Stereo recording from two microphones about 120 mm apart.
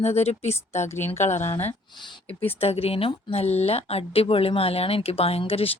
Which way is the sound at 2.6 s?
55° left (ahead or behind).